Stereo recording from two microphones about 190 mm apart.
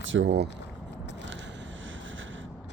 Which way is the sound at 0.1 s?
90° right.